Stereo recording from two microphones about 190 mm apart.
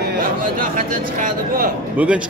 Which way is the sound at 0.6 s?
45° right (ahead or behind).